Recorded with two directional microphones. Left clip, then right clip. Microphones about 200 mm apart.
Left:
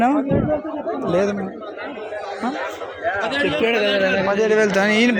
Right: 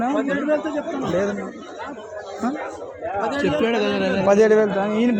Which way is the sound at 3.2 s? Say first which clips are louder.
Right 1 dB; 25° right (ahead or behind).